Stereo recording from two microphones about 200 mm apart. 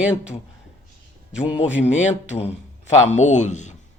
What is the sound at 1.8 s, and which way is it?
Speech, 35° left (ahead or behind).